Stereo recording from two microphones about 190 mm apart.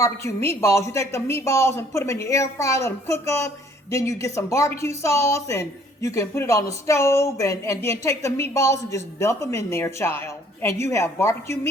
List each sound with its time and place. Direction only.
0.0 s a woman's voice: 15° left (ahead or behind)